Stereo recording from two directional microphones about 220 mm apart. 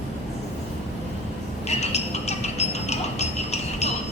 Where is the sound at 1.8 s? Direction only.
30° left (ahead or behind).